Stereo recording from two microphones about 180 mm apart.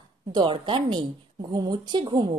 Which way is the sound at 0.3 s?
25° right (ahead or behind).